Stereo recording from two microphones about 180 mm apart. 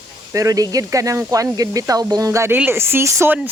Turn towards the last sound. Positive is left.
turn(degrees=-10)  # may be behind; listen again after turning